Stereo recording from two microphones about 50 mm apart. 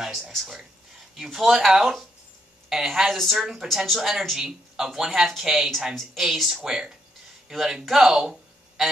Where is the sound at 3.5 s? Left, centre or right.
Centre.